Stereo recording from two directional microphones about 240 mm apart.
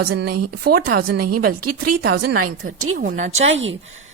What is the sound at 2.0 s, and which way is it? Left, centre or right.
Speech, right.